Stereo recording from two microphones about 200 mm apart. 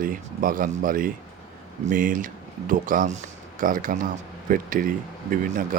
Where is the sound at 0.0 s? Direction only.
45° right (ahead or behind).